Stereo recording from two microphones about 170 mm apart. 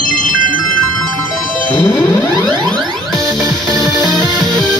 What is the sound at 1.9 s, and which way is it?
Music, 25° left (ahead or behind).